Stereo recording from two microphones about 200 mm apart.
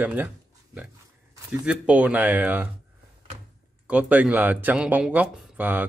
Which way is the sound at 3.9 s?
5° right (ahead or behind).